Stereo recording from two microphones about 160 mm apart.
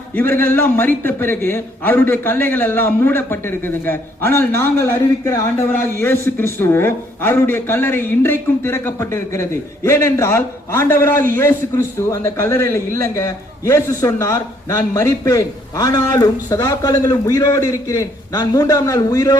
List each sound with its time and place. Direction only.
0.2 s a man's voice: 10° left (ahead or behind)